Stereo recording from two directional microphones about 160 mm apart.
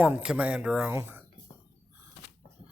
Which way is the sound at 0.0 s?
10° right (ahead or behind).